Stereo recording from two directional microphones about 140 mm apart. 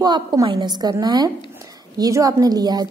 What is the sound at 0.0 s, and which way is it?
A woman's voice, 30° right (ahead or behind).